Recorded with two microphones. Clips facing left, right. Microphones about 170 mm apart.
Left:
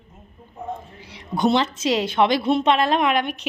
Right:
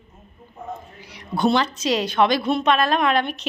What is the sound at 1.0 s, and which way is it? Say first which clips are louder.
A woman's voice: even; 25° left (ahead or behind).